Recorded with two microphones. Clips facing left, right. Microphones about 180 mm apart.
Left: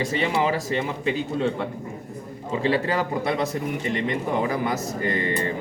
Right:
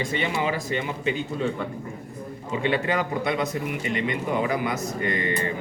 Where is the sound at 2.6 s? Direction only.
30° left (ahead or behind).